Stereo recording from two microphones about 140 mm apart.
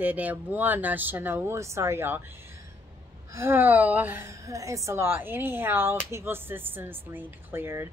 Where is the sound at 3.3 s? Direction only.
15° right (ahead or behind).